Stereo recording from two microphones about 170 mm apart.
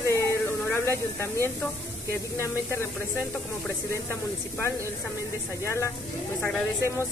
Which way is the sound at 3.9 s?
15° left (ahead or behind).